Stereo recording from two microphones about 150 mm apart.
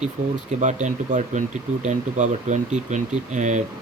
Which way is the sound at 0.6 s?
55° right (ahead or behind).